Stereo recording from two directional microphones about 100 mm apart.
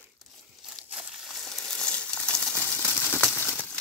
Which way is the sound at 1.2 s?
5° left (ahead or behind).